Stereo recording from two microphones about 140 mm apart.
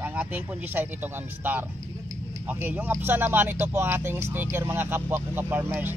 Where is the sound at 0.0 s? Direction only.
15° right (ahead or behind).